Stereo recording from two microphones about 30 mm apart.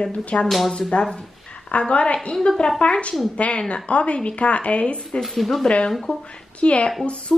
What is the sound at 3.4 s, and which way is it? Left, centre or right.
A woman's voice, left.